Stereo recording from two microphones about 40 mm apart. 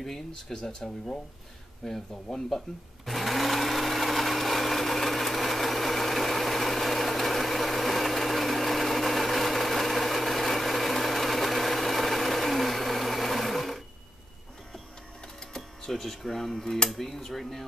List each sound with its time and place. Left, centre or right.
0.0 s speech: centre
3.1 s blender: centre
15.5 s speech: centre